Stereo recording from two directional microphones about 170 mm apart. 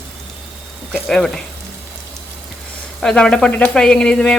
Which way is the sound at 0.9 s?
5° left (ahead or behind).